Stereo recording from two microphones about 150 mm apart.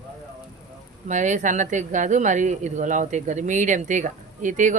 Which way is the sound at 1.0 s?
55° right (ahead or behind).